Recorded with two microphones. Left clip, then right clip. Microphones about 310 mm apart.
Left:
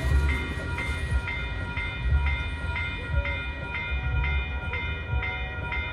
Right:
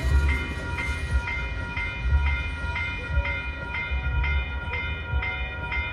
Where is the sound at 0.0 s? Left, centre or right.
Centre.